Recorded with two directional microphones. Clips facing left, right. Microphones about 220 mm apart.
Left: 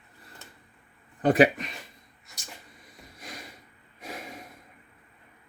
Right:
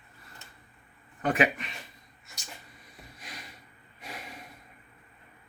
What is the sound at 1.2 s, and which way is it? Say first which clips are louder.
Speech: left 6 dB; 35° left (ahead or behind).